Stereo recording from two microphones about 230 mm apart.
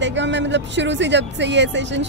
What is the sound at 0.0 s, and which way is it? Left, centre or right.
A woman's voice, right.